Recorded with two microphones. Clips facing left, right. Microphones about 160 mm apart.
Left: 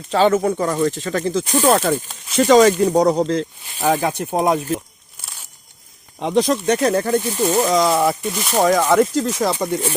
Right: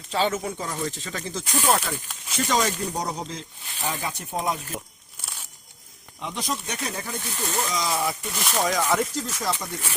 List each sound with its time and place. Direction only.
0.1 s speech: 55° left (ahead or behind)
2.4 s speech: 80° left
6.1 s speech: 90° left; by 9.0 s 55° left (ahead or behind)
9.1 s speech: 70° left (ahead or behind)